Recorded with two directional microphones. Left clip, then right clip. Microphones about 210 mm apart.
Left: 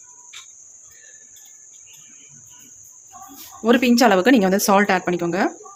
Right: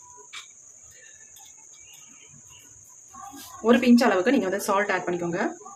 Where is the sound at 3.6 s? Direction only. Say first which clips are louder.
Left 4 dB; 45° left (ahead or behind).